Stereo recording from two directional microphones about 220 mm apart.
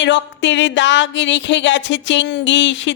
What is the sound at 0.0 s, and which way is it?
Speech, 55° left (ahead or behind).